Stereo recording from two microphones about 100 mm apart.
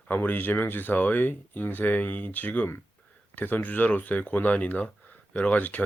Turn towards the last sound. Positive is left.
turn(degrees=15)  # may be behind; listen again after turning